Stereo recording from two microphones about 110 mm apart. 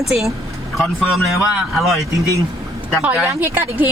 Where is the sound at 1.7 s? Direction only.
Centre (ahead or behind).